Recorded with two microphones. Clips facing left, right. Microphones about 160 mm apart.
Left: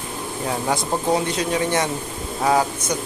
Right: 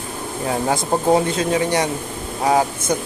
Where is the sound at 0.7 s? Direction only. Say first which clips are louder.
Right 4 dB; 25° right (ahead or behind).